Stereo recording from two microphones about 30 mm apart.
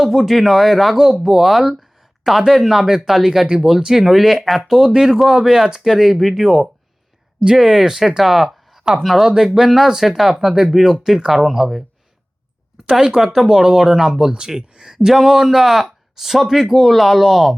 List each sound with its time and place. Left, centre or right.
0.0 s speech: centre
0.9 s speech: centre
4.9 s a man's voice: right; by 8.8 s centre
8.8 s speech: right
9.2 s a man's voice: centre
12.7 s speech: right; by 17.5 s centre